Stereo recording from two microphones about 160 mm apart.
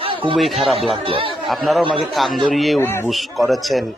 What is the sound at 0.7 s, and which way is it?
Speech, 35° right (ahead or behind).